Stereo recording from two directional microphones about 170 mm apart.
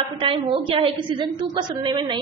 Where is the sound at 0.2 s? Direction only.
30° right (ahead or behind).